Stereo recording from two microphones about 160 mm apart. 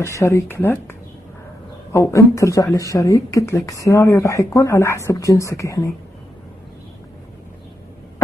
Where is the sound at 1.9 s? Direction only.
15° left (ahead or behind).